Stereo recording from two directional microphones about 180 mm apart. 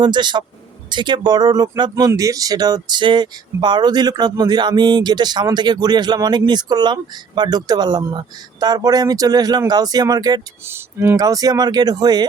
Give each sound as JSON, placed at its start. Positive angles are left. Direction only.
{"t": 0.0, "sound": "speech", "side_deg": -25}